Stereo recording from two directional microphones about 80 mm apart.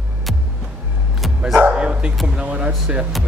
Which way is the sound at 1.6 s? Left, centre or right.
Centre.